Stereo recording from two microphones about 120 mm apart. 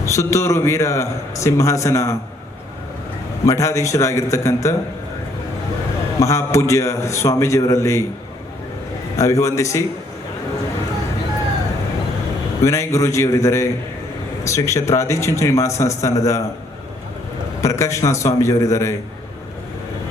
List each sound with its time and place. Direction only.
0.0 s a man's voice: 25° left (ahead or behind)
3.4 s a man's voice: 25° left (ahead or behind)
6.1 s a man's voice: 25° left (ahead or behind)
9.1 s a man's voice: 25° left (ahead or behind)
12.6 s a man's voice: 25° left (ahead or behind)
17.6 s a man's voice: 25° left (ahead or behind)